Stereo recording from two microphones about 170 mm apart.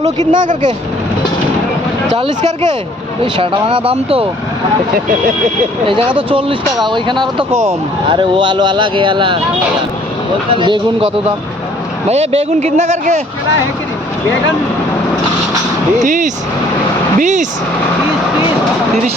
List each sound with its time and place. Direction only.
0.3 s speech: 50° right (ahead or behind)
2.1 s speech: 35° right (ahead or behind)
5.8 s speech: 30° right (ahead or behind)
7.5 s speech: 15° right (ahead or behind)
8.1 s speech: 30° right (ahead or behind)
12.0 s speech: 40° right (ahead or behind)
16.0 s speech: 50° right (ahead or behind)